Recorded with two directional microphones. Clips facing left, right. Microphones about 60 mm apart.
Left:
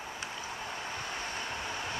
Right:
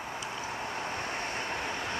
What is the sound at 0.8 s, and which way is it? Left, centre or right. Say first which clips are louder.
Vehicle: right 3 dB; right.